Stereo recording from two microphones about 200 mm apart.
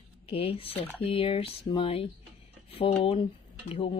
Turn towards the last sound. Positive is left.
turn(degrees=25)  # may be behind; listen again after turning